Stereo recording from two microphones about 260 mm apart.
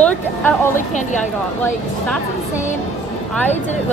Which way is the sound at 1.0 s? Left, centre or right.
Left.